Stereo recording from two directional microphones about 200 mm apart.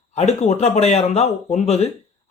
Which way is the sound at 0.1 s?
35° left (ahead or behind).